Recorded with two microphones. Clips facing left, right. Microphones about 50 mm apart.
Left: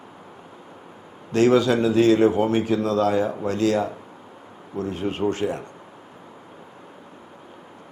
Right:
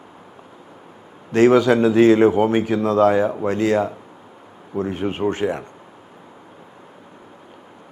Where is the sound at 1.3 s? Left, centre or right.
Right.